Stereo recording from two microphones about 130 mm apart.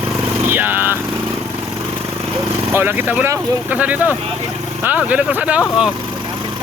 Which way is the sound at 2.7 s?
15° right (ahead or behind).